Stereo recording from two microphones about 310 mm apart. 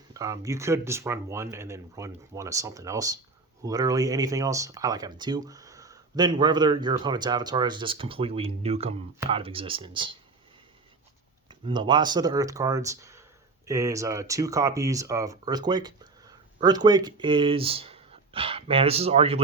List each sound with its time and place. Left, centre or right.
0.1 s speech: centre
11.4 s speech: centre